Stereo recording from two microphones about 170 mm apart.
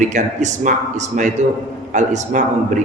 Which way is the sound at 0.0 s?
45° right (ahead or behind).